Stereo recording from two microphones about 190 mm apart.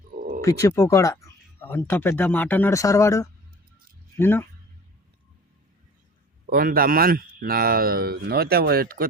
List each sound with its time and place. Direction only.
0.2 s wild animals: 45° right (ahead or behind)
0.4 s speech: 15° left (ahead or behind)
6.5 s speech: 50° right (ahead or behind)